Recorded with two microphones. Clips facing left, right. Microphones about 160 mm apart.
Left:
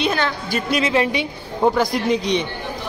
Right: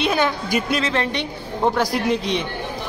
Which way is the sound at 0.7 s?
10° left (ahead or behind).